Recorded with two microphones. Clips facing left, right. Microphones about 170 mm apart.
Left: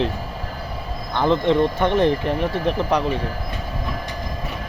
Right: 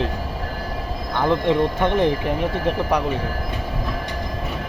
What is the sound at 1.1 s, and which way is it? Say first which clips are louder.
Speech: left 1 dB; 10° right (ahead or behind).